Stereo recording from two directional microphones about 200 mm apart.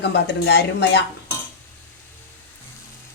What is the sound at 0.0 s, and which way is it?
Speech, 55° left (ahead or behind).